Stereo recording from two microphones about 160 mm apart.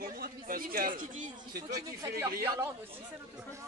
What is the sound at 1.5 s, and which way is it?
Speech, 20° right (ahead or behind).